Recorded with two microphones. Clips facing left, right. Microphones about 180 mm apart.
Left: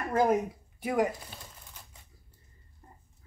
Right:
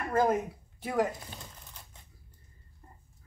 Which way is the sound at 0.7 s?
15° left (ahead or behind).